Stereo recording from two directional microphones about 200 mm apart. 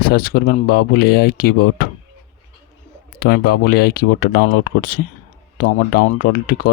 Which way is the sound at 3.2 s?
45° left (ahead or behind).